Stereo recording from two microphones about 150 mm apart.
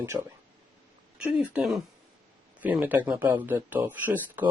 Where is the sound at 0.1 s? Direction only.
20° right (ahead or behind).